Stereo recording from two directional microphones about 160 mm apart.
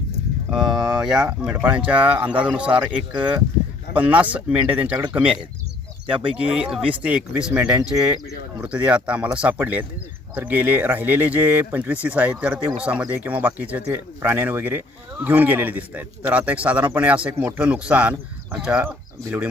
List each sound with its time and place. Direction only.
0.5 s speech: centre (ahead or behind)